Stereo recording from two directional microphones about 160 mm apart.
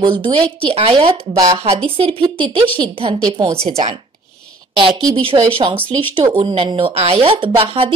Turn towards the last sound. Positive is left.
turn(degrees=-35)  # may be behind; listen again after turning